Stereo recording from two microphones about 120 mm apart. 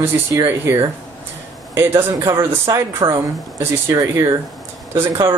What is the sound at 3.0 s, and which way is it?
Speech, 40° right (ahead or behind).